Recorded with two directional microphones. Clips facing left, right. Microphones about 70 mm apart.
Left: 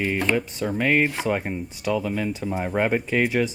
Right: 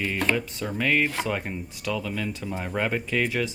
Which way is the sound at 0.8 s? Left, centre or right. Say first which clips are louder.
Left 2 dB; centre.